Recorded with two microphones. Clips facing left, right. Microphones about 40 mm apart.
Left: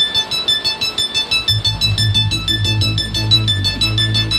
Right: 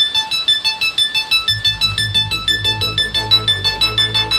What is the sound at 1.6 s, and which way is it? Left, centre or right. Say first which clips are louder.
Music: right 1 dB; centre.